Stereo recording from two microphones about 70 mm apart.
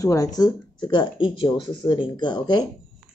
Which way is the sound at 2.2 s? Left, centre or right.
Left.